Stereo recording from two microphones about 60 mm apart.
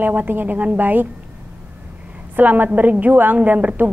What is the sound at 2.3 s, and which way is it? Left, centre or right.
A woman's voice, right.